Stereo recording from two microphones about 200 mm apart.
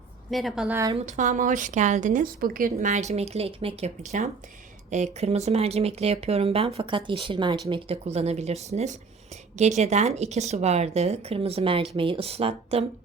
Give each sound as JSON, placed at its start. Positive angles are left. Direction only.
{"t": 0.3, "sound": "a woman's voice", "side_deg": 0}
{"t": 0.9, "sound": "speech", "side_deg": -35}